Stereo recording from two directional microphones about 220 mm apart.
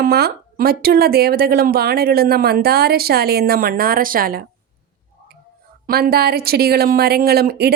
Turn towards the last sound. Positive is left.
turn(degrees=-45)  # may be behind; listen again after turning